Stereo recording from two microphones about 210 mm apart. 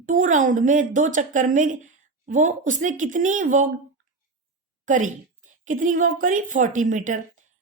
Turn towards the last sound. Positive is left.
turn(degrees=-35)  # may be behind; listen again after turning